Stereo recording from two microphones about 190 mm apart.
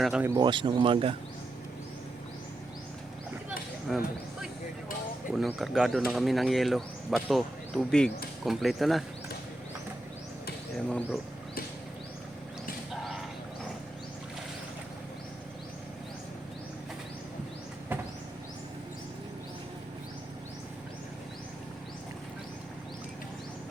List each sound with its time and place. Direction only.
0.0 s speech: 5° right (ahead or behind)
0.3 s speech: 25° right (ahead or behind)
3.9 s speech: centre (ahead or behind)
5.3 s speech: centre (ahead or behind)
10.8 s speech: 5° left (ahead or behind)